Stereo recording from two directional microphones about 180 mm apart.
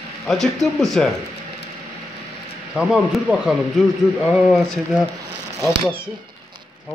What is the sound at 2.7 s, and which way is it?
Speech, centre (ahead or behind).